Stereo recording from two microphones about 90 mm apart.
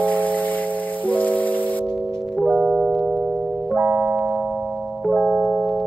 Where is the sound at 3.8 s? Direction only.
20° right (ahead or behind).